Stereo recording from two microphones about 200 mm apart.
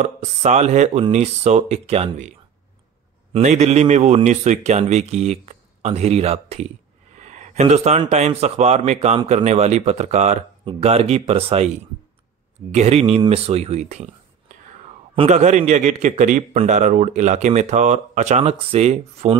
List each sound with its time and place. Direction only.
0.0 s a man's voice: 35° right (ahead or behind)
3.3 s a man's voice: 35° right (ahead or behind)
12.7 s a man's voice: 30° right (ahead or behind)
15.1 s a man's voice: 35° right (ahead or behind)